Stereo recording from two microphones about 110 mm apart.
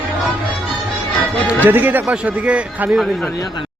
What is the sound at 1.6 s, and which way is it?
A man's voice, 15° right (ahead or behind).